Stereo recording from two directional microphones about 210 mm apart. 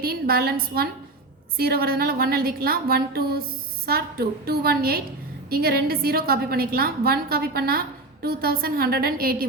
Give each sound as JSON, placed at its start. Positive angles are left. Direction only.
{"t": 0.0, "sound": "a woman's voice", "side_deg": -45}